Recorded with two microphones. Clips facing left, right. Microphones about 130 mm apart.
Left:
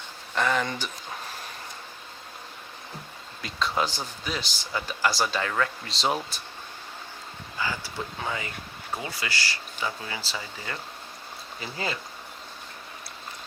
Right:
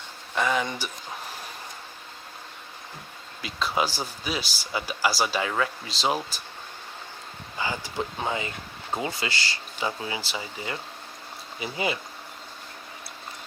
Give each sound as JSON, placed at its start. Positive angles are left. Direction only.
{"t": 0.3, "sound": "speech", "side_deg": -5}
{"t": 3.4, "sound": "speech", "side_deg": -5}
{"t": 7.6, "sound": "speech", "side_deg": -20}